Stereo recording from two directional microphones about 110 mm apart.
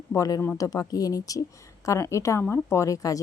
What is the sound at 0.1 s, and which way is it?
Speech, 30° left (ahead or behind).